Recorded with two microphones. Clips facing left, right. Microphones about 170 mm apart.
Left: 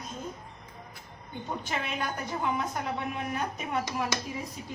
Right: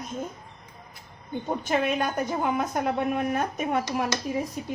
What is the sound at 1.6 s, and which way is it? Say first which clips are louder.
A woman's voice: right 9 dB; 50° right (ahead or behind).